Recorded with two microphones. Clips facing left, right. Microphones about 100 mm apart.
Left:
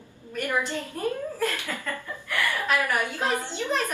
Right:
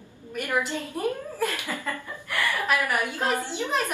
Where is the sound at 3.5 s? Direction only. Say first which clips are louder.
Even; 15° right (ahead or behind).